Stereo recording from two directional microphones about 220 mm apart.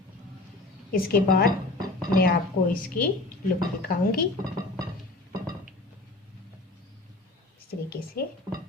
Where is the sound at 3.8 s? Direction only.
45° left (ahead or behind).